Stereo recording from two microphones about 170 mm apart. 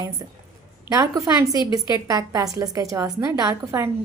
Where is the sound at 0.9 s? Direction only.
20° right (ahead or behind).